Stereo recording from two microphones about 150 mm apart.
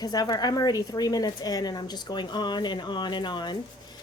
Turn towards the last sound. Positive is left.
turn(degrees=30)  # may be behind; listen again after turning